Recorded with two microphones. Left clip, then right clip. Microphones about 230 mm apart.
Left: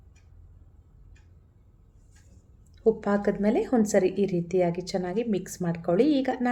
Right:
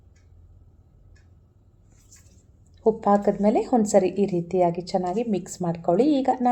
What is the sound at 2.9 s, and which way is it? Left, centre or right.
A woman's voice, centre.